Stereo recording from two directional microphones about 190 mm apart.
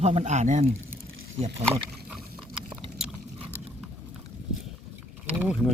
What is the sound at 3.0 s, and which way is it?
Biting, 5° right (ahead or behind).